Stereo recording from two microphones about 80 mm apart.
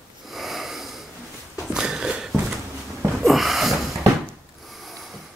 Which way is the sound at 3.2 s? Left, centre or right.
Centre.